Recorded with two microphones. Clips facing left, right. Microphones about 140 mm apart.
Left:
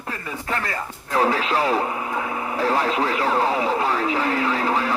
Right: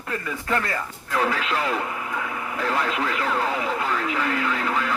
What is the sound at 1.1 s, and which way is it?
Speech, 30° left (ahead or behind).